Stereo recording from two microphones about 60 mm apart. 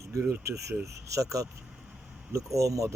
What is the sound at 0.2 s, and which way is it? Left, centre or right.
Speech, right.